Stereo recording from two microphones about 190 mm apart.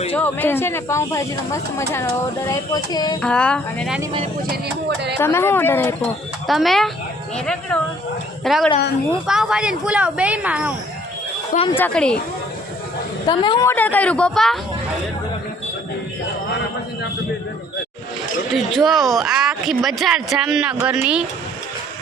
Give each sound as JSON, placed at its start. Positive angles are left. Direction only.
{"t": 0.2, "sound": "speech", "side_deg": 10}
{"t": 2.5, "sound": "speech", "side_deg": 20}
{"t": 3.2, "sound": "speech", "side_deg": 5}
{"t": 5.2, "sound": "speech", "side_deg": 15}
{"t": 6.5, "sound": "speech", "side_deg": 0}
{"t": 11.5, "sound": "speech", "side_deg": 30}
{"t": 11.8, "sound": "speech", "side_deg": 5}
{"t": 13.2, "sound": "speech", "side_deg": 25}
{"t": 13.7, "sound": "speech", "side_deg": 10}
{"t": 18.5, "sound": "speech", "side_deg": 0}